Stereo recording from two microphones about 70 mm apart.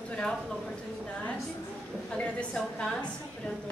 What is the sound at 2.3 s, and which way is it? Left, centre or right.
Speech, centre.